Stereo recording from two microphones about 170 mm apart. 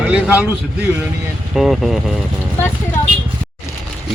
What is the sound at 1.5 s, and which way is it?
Speech, centre (ahead or behind).